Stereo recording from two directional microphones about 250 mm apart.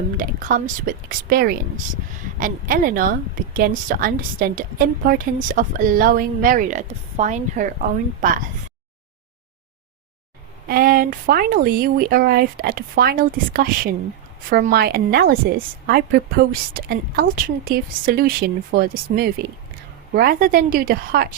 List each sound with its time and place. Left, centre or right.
0.2 s speech: right
10.7 s speech: right